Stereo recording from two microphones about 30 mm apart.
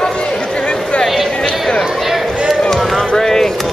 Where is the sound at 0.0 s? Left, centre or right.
Left.